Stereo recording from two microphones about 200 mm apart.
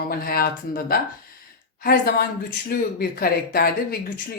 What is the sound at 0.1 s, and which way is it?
Speech, 50° left (ahead or behind).